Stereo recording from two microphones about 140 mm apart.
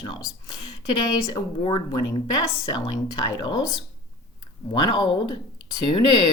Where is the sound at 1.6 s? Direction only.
40° left (ahead or behind).